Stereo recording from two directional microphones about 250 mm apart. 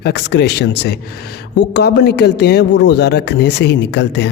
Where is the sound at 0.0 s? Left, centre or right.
Left.